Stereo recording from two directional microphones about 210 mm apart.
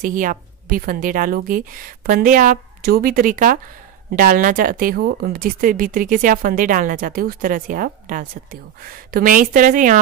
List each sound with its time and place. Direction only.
0.0 s a woman's voice: 40° right (ahead or behind)